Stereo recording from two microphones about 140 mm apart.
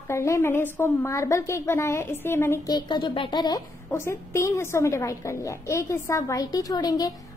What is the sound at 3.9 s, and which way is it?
A woman's voice, 20° left (ahead or behind).